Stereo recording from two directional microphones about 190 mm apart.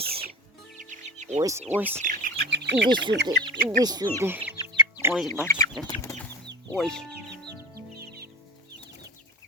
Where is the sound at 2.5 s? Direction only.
65° right (ahead or behind).